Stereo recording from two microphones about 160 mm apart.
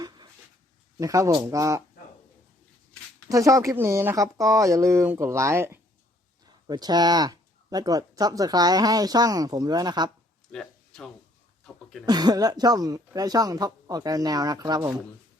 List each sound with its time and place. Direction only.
0.9 s speech: 20° right (ahead or behind)
3.2 s speech: 20° right (ahead or behind)
10.5 s a sound: 5° left (ahead or behind)
12.0 s speech: 25° right (ahead or behind)